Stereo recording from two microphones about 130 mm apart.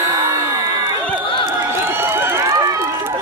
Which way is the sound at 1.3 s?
40° left (ahead or behind).